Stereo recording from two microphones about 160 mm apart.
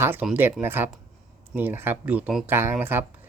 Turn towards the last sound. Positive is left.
turn(degrees=-15)  # may be behind; listen again after turning